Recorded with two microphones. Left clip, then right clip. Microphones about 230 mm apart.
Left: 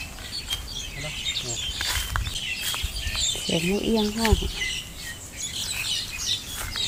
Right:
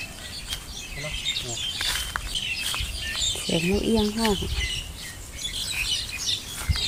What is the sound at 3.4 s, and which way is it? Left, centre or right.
Speech, right.